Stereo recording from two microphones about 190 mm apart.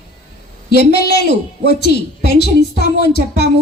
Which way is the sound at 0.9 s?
60° left (ahead or behind).